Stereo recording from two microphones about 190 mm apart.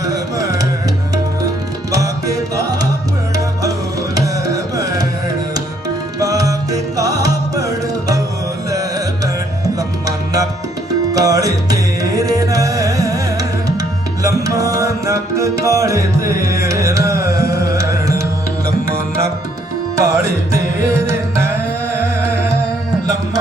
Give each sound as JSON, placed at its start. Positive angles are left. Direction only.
{"t": 0.0, "sound": "music", "side_deg": -20}
{"t": 1.9, "sound": "music", "side_deg": -15}
{"t": 6.1, "sound": "music", "side_deg": -20}
{"t": 20.0, "sound": "music", "side_deg": -15}